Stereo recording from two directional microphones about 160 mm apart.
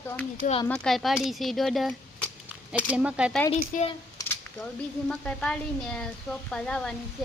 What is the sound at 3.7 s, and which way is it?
Speech, 60° left (ahead or behind).